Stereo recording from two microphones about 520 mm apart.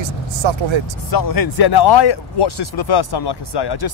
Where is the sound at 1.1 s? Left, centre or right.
Left.